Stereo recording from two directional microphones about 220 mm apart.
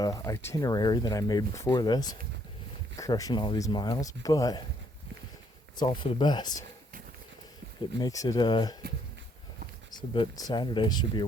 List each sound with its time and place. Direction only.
0.0 s speech: 15° left (ahead or behind)
5.9 s speech: 20° left (ahead or behind)
7.9 s speech: 15° left (ahead or behind)
9.9 s speech: 20° left (ahead or behind)